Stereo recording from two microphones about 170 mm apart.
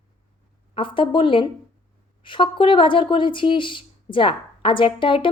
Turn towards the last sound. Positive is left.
turn(degrees=30)  # may be behind; listen again after turning